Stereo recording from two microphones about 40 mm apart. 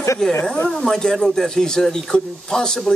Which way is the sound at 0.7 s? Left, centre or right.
Centre.